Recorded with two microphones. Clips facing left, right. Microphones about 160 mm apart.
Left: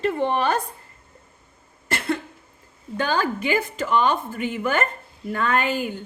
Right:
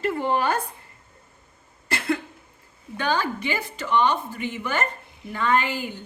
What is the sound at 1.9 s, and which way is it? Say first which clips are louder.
Cough: even; 35° left (ahead or behind).